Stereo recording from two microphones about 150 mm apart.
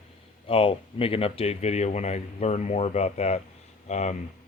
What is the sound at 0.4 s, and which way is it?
Speech, 35° left (ahead or behind).